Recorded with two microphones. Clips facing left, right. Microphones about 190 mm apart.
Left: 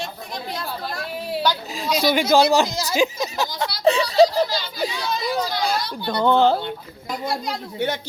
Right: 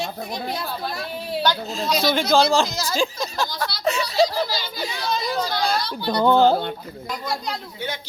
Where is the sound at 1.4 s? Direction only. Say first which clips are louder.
Right 2 dB; 10° left (ahead or behind).